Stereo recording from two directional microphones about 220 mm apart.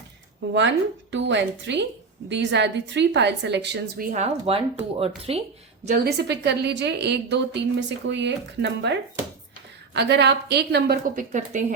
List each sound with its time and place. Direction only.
1.1 s a woman's voice: 55° right (ahead or behind)
4.1 s speech: 25° right (ahead or behind)
5.8 s a woman's voice: 45° right (ahead or behind)